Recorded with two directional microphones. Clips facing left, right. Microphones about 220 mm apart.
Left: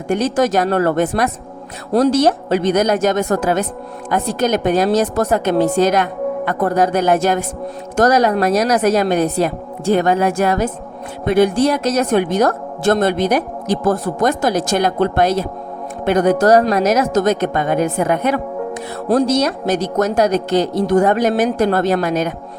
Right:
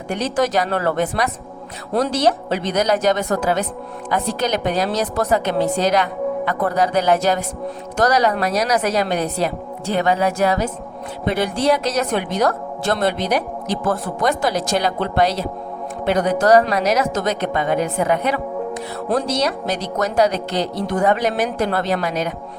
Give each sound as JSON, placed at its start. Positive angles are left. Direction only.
{"t": 0.1, "sound": "speech", "side_deg": 45}